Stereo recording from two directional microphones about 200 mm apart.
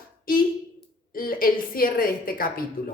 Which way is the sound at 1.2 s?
45° left (ahead or behind).